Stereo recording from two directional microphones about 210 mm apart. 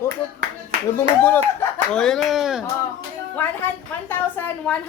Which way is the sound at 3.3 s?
10° left (ahead or behind).